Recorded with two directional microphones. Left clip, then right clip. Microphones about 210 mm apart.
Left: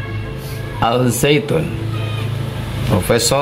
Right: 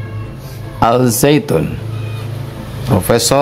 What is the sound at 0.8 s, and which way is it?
Speech, 40° right (ahead or behind).